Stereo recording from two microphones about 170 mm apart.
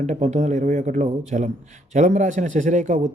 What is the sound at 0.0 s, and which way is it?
Speech, 45° right (ahead or behind).